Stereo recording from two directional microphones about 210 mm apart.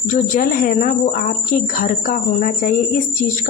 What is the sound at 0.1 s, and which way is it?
Speech, 35° left (ahead or behind).